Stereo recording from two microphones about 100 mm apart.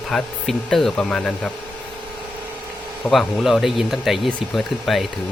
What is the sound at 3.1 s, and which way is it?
Speech, centre (ahead or behind).